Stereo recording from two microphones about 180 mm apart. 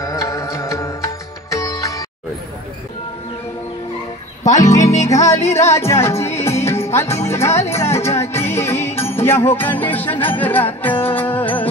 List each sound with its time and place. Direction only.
0.0 s music: 15° left (ahead or behind)
4.5 s music: 20° left (ahead or behind)